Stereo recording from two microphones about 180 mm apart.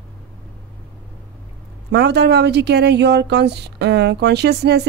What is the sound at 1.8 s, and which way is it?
Speech, 65° right (ahead or behind).